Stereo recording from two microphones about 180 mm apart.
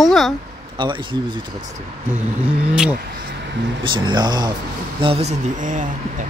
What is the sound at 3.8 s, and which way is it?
Speech, 25° right (ahead or behind).